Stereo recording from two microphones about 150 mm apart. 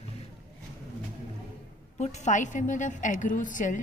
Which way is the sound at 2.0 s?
50° left (ahead or behind).